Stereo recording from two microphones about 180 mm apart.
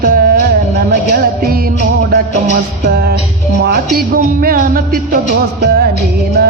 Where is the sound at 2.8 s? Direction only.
60° right (ahead or behind).